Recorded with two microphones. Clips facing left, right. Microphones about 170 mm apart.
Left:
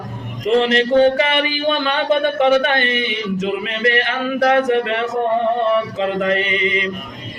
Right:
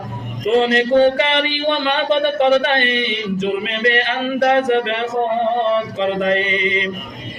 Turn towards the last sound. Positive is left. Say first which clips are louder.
# even
turn(degrees=-20)  # may be behind; listen again after turning